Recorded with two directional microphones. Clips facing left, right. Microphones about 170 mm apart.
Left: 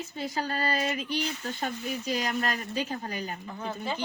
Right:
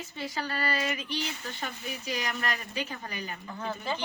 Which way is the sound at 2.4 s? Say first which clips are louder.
Left 3 dB; 40° left (ahead or behind).